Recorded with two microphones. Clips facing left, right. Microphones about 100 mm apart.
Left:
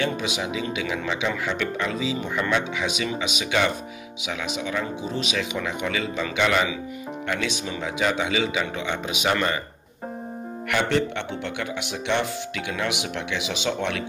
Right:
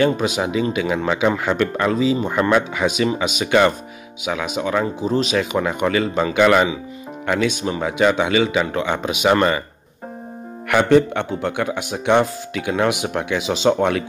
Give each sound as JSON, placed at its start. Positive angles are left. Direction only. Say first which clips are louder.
{"t": 0.0, "sound": "speech", "louder": "right 8 dB", "side_deg": -50}
{"t": 5.0, "sound": "speech", "louder": "right 8 dB", "side_deg": -45}
{"t": 6.3, "sound": "speech", "louder": "right 8 dB", "side_deg": -65}
{"t": 7.2, "sound": "speech", "louder": "right 9 dB", "side_deg": -50}
{"t": 8.0, "sound": "speech", "louder": "right 7 dB", "side_deg": -65}
{"t": 10.7, "sound": "speech", "louder": "right 9 dB", "side_deg": -50}